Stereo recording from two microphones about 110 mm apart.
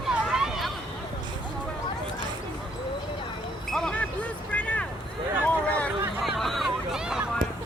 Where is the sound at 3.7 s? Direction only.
10° left (ahead or behind).